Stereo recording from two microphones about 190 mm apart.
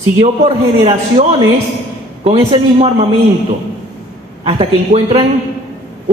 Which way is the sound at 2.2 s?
30° right (ahead or behind).